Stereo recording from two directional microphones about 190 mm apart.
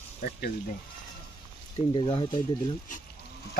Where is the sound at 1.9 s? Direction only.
25° left (ahead or behind).